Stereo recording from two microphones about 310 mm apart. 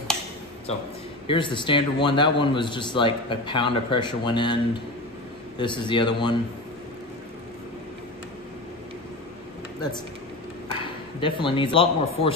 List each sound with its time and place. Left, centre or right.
1.2 s a man's voice: centre
5.6 s a man's voice: centre
10.8 s speech: centre